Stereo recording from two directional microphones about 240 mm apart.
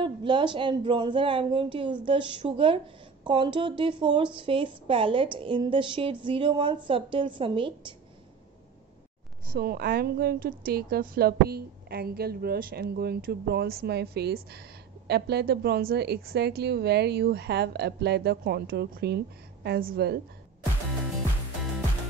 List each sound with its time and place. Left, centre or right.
0.0 s a woman's voice: right
9.5 s a woman's voice: right